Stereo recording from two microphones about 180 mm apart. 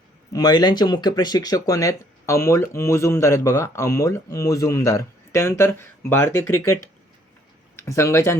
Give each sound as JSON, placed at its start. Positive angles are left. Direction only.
{"t": 0.3, "sound": "speech", "side_deg": 20}
{"t": 7.8, "sound": "speech", "side_deg": 15}